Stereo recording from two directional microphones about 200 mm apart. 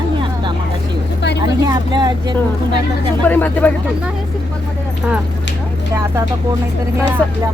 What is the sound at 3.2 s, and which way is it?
Speech, 10° left (ahead or behind).